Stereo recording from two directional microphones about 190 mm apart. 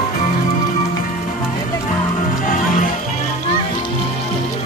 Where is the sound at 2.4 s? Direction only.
45° left (ahead or behind).